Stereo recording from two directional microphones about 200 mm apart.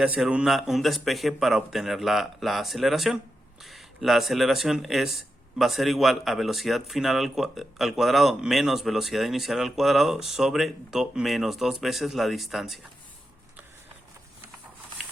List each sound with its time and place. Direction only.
0.0 s speech: 5° right (ahead or behind)